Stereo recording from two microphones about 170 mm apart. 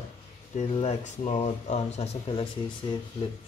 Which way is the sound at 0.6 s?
40° left (ahead or behind).